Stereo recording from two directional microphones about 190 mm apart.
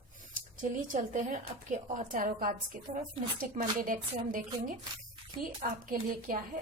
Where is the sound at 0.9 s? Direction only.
40° right (ahead or behind).